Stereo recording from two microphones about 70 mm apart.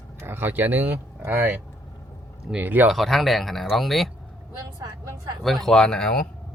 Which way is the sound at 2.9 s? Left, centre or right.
Centre.